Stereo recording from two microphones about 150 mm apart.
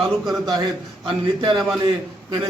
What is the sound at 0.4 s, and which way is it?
A man's voice, 30° right (ahead or behind).